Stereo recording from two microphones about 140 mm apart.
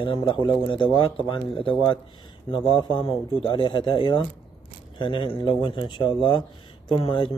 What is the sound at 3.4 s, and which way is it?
Speech, 35° left (ahead or behind).